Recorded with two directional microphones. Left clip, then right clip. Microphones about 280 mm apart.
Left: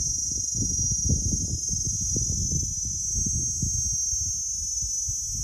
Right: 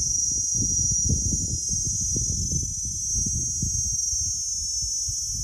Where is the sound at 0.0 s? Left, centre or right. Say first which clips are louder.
Right 3 dB; right.